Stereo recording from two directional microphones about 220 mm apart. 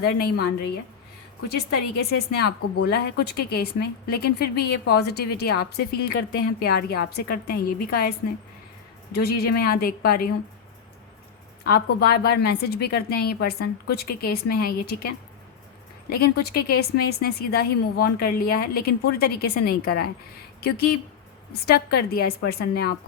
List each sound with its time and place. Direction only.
0.0 s a woman's voice: 45° left (ahead or behind)
2.8 s a woman's voice: 45° left (ahead or behind)
9.1 s a woman's voice: 45° left (ahead or behind)
11.6 s a woman's voice: 45° left (ahead or behind)